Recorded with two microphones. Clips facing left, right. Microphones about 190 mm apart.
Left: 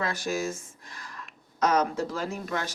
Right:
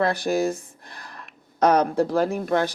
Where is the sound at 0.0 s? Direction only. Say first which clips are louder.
Right 8 dB; 60° right (ahead or behind).